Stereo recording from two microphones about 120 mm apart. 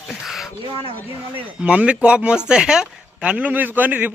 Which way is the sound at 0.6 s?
50° right (ahead or behind).